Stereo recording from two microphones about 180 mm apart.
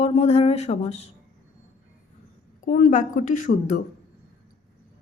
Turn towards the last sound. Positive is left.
turn(degrees=45)  # may be behind; listen again after turning